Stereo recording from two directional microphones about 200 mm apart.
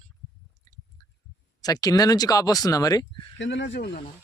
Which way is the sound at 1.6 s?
20° left (ahead or behind).